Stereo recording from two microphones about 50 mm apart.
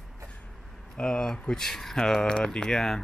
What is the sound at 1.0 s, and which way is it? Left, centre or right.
Speech, centre.